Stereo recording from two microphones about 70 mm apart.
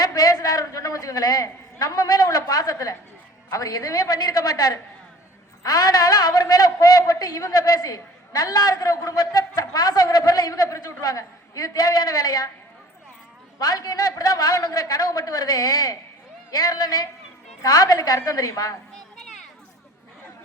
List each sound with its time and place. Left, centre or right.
0.0 s a man's voice: left
13.6 s a man's voice: left
17.6 s a man's voice: left